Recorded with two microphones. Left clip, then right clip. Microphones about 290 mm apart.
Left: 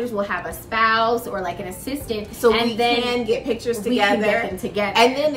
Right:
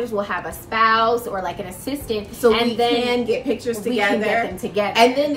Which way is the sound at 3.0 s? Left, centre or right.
Centre.